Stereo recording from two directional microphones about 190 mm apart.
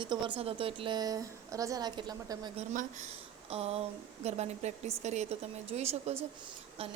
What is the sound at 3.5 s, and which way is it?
A woman's voice, 30° right (ahead or behind).